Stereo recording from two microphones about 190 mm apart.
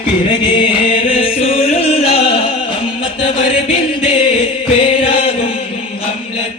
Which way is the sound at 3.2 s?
30° left (ahead or behind).